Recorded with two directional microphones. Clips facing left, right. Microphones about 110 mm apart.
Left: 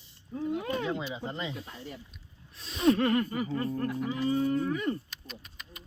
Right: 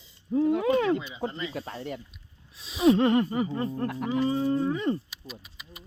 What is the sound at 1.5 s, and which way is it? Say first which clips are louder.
Speech: right 7 dB; 80° right.